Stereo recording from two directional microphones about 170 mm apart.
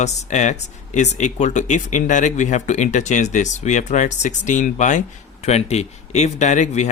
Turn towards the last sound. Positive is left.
turn(degrees=45)  # may be behind; listen again after turning